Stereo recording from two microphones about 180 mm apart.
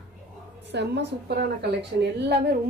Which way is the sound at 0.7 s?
70° right (ahead or behind).